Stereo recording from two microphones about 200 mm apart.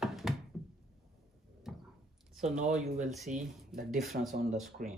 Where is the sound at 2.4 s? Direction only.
35° right (ahead or behind).